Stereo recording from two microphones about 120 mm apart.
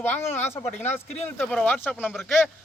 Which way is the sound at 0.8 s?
70° left (ahead or behind).